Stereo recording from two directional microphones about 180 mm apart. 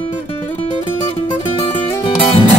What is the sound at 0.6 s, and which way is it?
Music, 30° left (ahead or behind).